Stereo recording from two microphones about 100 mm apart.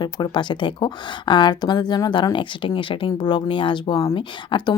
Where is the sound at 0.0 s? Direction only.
50° left (ahead or behind).